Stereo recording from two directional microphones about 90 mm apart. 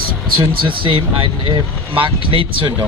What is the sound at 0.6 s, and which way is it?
Speech, 75° right (ahead or behind).